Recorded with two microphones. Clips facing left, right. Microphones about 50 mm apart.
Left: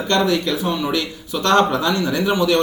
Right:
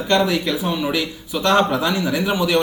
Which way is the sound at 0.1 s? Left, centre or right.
Centre.